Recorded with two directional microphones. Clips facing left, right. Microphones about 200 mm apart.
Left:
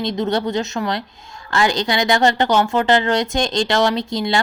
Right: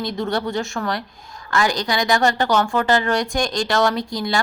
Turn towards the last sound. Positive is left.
turn(degrees=25)  # may be behind; listen again after turning